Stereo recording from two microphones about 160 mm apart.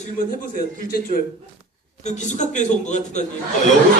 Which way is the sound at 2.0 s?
50° left (ahead or behind).